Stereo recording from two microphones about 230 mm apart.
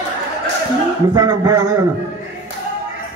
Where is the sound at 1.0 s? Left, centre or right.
Centre.